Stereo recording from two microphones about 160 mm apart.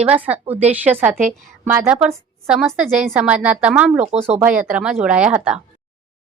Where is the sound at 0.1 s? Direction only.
10° right (ahead or behind).